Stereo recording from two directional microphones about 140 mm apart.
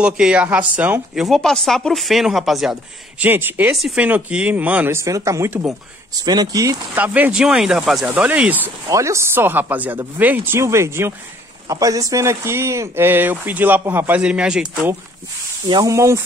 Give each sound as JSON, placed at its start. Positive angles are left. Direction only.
{"t": 0.0, "sound": "speech", "side_deg": -5}
{"t": 1.2, "sound": "speech", "side_deg": 0}
{"t": 3.3, "sound": "speech", "side_deg": -15}
{"t": 3.7, "sound": "speech", "side_deg": -5}
{"t": 6.2, "sound": "speech", "side_deg": -30}
{"t": 7.0, "sound": "speech", "side_deg": -10}
{"t": 8.8, "sound": "speech", "side_deg": -20}
{"t": 15.7, "sound": "speech", "side_deg": -25}